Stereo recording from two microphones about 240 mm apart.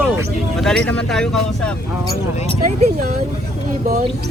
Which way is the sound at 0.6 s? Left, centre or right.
Centre.